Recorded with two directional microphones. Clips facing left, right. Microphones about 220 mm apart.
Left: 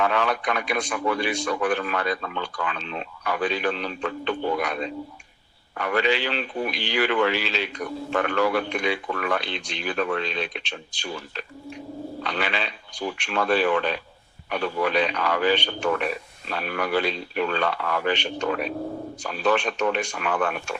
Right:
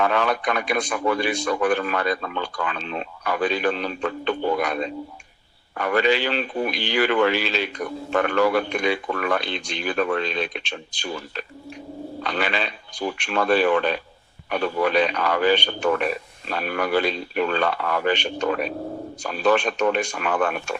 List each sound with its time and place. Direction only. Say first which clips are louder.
0.0 s a man's voice: right 2 dB; 45° right (ahead or behind)